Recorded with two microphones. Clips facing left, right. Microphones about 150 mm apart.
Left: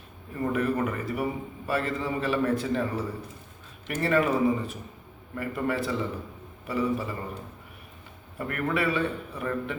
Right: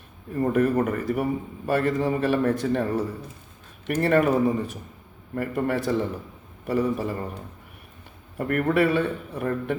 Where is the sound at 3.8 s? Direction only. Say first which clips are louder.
Right 4 dB; 50° right (ahead or behind).